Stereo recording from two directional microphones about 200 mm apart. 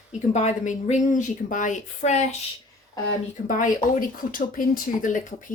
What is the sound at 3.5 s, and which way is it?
Speech, 40° left (ahead or behind).